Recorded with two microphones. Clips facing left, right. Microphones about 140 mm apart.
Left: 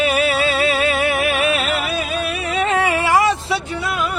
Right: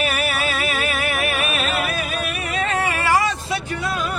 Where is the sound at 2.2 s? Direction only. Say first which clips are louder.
Left 4 dB; 30° left (ahead or behind).